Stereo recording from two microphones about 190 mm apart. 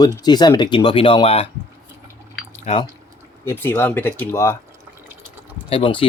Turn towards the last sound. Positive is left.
turn(degrees=30)  # may be behind; listen again after turning